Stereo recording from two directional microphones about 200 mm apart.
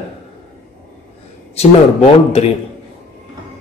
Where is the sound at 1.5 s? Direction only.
30° left (ahead or behind).